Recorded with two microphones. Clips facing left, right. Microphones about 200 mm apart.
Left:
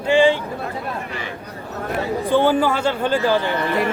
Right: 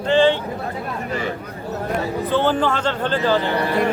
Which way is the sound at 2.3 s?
10° left (ahead or behind).